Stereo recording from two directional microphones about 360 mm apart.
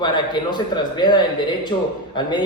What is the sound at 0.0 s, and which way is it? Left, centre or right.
Speech, centre.